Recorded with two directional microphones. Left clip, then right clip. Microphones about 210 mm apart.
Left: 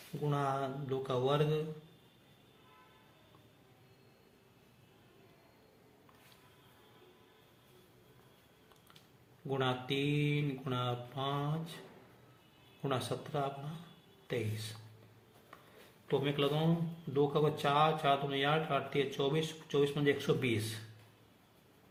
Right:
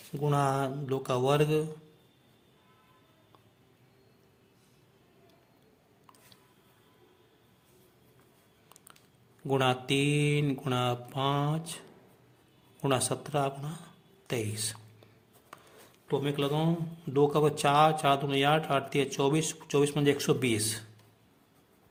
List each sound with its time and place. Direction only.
0.2 s speech: 45° right (ahead or behind)
9.5 s speech: 45° right (ahead or behind)
12.8 s speech: 45° right (ahead or behind)
16.0 s a man's voice: 30° right (ahead or behind)
17.2 s speech: 45° right (ahead or behind)